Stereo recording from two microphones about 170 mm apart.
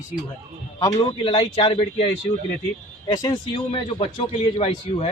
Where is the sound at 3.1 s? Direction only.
25° left (ahead or behind).